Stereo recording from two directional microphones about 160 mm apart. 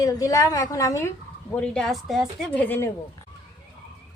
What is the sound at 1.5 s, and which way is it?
A woman's voice, 5° left (ahead or behind).